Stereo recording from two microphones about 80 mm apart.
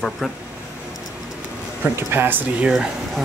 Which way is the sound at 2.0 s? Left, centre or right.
Right.